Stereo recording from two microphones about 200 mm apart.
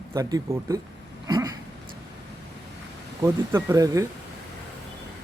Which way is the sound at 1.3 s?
20° right (ahead or behind).